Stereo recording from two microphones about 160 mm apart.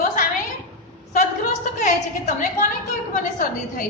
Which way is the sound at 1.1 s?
50° left (ahead or behind).